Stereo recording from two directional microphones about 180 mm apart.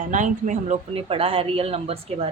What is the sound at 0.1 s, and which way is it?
A woman's voice, 45° right (ahead or behind).